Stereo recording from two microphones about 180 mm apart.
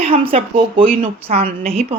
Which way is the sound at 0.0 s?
30° right (ahead or behind).